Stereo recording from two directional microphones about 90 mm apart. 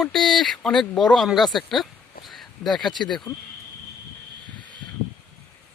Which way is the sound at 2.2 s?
Centre (ahead or behind).